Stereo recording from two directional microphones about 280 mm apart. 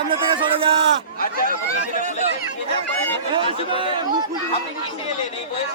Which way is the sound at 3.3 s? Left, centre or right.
Centre.